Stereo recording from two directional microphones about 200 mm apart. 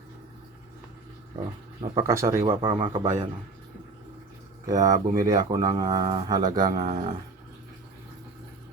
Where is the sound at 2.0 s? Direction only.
15° right (ahead or behind).